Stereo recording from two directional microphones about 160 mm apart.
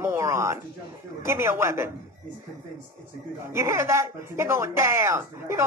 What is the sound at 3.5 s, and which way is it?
Speech, 15° right (ahead or behind).